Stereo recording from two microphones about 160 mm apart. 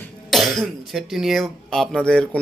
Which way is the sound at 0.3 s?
Centre (ahead or behind).